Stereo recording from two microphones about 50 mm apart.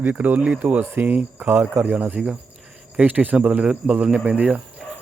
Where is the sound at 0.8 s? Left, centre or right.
Right.